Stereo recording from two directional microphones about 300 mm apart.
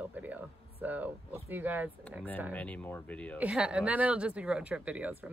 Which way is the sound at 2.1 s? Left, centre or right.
Centre.